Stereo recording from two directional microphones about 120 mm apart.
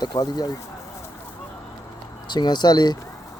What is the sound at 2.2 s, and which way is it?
Speech, 35° left (ahead or behind).